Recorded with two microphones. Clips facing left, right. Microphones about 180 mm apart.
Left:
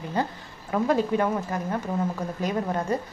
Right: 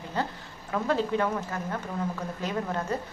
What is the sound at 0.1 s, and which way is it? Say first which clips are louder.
A woman's voice: left 3 dB; 15° left (ahead or behind).